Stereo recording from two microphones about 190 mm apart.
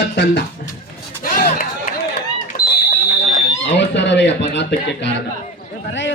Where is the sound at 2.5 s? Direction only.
45° left (ahead or behind).